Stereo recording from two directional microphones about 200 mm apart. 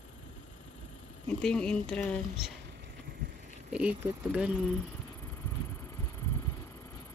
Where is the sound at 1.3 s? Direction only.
5° left (ahead or behind).